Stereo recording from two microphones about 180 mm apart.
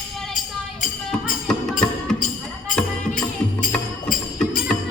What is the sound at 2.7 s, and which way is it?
Music, 5° left (ahead or behind).